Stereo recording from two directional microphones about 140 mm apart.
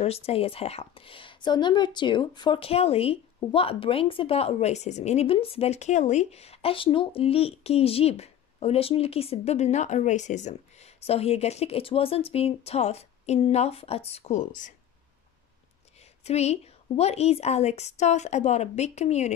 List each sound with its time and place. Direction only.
0.0 s speech: 45° left (ahead or behind); by 14.7 s 65° left (ahead or behind)
16.3 s speech: 50° left (ahead or behind)